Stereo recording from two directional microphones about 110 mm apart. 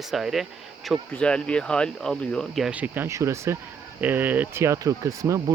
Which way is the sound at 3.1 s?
25° right (ahead or behind).